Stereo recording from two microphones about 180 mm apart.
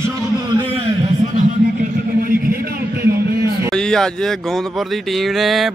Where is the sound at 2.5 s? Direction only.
60° right (ahead or behind).